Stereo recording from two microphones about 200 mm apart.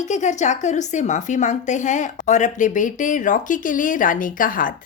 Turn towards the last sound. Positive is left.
turn(degrees=45)  # may be behind; listen again after turning